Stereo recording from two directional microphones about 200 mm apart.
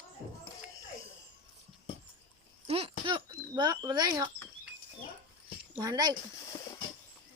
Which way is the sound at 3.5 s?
20° right (ahead or behind).